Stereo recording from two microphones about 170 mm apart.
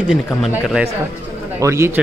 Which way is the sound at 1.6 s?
15° right (ahead or behind).